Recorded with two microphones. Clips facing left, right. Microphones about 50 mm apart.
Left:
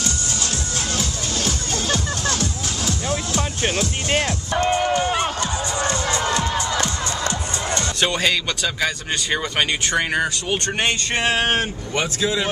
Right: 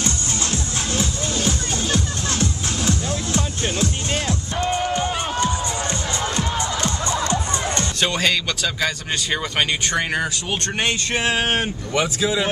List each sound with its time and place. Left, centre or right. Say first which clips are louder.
3.1 s music: left 1 dB; left
4.6 s run: left 2 dB; left
8.0 s speech: even; centre